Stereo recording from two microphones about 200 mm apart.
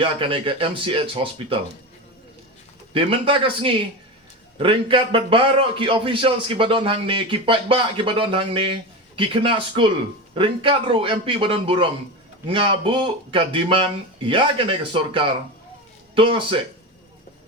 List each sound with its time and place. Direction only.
0.0 s a man's voice: 25° right (ahead or behind)
2.9 s a man's voice: 25° right (ahead or behind)